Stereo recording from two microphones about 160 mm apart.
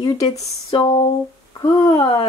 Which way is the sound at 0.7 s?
35° left (ahead or behind).